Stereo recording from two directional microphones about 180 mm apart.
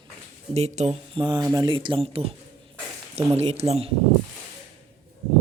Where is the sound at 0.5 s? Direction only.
35° right (ahead or behind).